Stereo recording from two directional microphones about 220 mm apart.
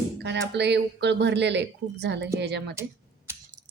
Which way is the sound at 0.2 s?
50° right (ahead or behind).